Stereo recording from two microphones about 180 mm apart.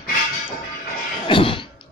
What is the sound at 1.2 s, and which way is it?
Cough, 30° left (ahead or behind).